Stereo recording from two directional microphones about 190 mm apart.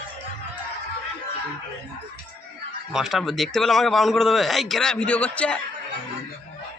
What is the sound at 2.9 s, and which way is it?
A man's voice, centre (ahead or behind).